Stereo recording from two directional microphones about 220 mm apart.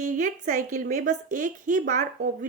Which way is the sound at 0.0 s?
35° right (ahead or behind).